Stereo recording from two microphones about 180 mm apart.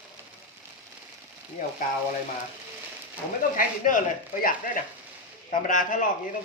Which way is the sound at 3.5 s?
50° left (ahead or behind).